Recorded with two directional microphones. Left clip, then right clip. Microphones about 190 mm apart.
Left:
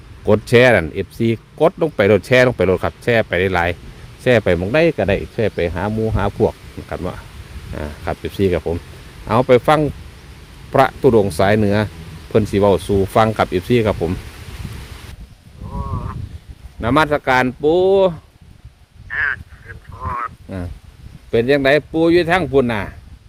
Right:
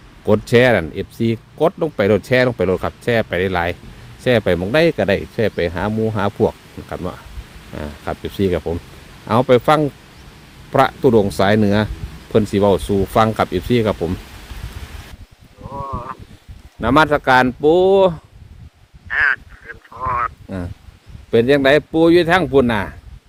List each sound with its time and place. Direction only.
0.3 s speech: 10° left (ahead or behind)
16.8 s a man's voice: 15° right (ahead or behind)
19.0 s duck: 60° right (ahead or behind)
21.2 s speech: 20° right (ahead or behind)